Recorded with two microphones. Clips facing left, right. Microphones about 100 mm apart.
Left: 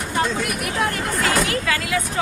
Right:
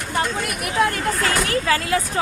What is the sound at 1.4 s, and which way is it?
Speech, 35° right (ahead or behind).